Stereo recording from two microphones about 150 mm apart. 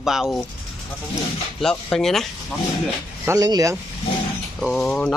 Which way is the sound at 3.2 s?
20° right (ahead or behind).